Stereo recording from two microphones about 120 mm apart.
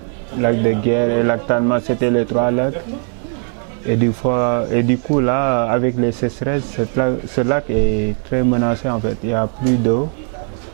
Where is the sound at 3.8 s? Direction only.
15° right (ahead or behind).